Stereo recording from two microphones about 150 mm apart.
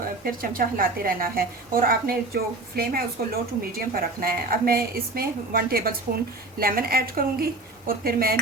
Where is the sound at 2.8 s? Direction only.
90° right.